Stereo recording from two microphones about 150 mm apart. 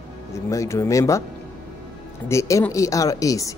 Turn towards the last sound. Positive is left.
turn(degrees=20)  # may be behind; listen again after turning